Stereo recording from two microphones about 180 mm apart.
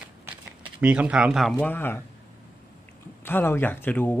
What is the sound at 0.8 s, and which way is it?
Speech, 10° right (ahead or behind).